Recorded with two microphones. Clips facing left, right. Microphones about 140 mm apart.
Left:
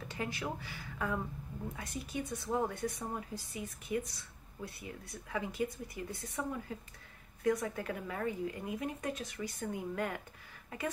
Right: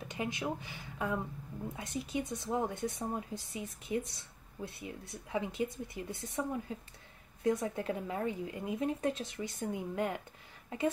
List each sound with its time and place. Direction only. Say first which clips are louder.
0.1 s speech: right 3 dB; 20° right (ahead or behind)